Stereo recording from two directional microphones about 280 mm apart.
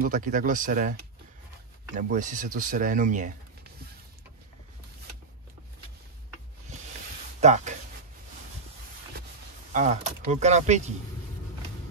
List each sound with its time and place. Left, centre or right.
0.0 s speech: right
2.0 s speech: right
7.3 s speech: right
9.7 s speech: right